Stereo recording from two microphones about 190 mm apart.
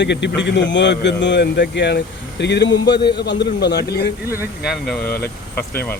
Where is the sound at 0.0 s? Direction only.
65° left (ahead or behind).